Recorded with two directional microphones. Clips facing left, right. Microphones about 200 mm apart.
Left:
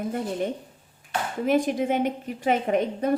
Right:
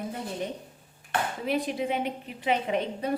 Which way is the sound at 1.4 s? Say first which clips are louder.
Left 9 dB; 45° left (ahead or behind).